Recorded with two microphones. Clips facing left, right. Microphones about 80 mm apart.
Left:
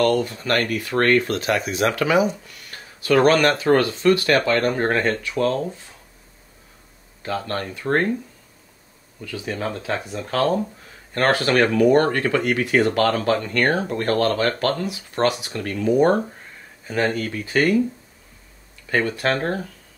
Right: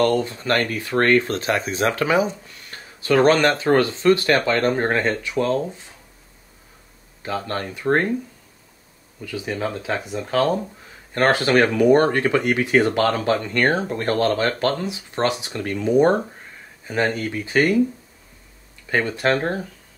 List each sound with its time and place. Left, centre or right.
0.0 s speech: right
7.2 s speech: centre
9.2 s speech: centre
18.9 s speech: right